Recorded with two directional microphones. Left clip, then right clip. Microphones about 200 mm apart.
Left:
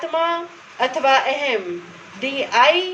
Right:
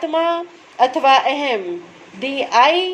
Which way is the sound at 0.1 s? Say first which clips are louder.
Even; 50° right (ahead or behind).